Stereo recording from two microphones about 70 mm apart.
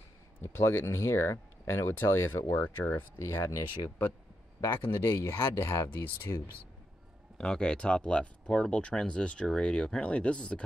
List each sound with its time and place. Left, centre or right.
0.4 s speech: left
5.9 s speech: left
7.3 s speech: centre